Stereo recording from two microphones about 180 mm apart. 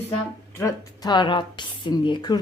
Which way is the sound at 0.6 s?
20° left (ahead or behind).